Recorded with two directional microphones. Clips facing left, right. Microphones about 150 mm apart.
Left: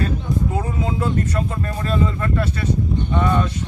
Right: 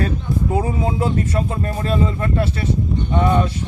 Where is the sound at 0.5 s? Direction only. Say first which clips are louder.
Right 3 dB; 30° right (ahead or behind).